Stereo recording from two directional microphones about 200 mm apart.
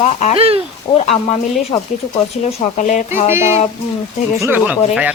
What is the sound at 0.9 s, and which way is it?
Speech, 30° left (ahead or behind).